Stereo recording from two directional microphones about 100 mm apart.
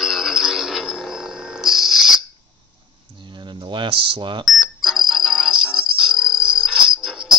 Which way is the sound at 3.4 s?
50° right (ahead or behind).